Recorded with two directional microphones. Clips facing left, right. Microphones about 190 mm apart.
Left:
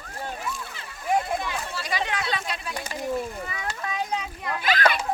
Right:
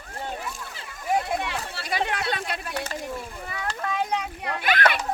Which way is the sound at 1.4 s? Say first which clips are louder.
Even; 65° right (ahead or behind).